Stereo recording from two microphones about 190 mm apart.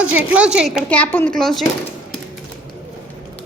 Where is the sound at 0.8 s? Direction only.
10° left (ahead or behind).